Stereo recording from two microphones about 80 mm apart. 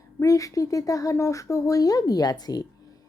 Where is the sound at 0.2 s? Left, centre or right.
Left.